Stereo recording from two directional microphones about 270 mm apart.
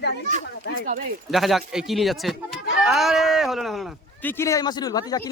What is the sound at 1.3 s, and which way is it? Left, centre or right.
Speech, centre.